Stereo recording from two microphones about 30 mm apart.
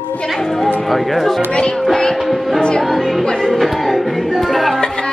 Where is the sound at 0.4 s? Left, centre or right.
Centre.